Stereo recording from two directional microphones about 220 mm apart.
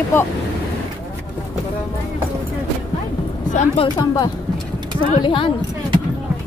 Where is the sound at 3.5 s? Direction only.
20° left (ahead or behind).